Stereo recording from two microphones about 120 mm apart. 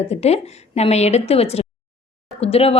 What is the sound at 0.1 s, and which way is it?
A woman's voice, 60° left (ahead or behind).